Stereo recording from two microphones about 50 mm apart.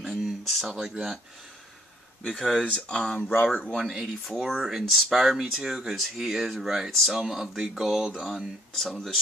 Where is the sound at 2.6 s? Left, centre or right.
Centre.